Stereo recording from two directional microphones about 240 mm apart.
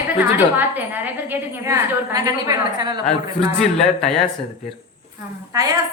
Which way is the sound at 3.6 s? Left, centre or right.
Centre.